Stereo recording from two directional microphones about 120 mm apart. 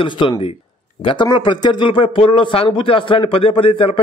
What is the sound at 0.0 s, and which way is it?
A man's voice, 40° left (ahead or behind).